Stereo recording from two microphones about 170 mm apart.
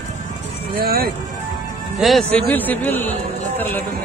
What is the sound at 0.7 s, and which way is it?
Speech, 60° right (ahead or behind).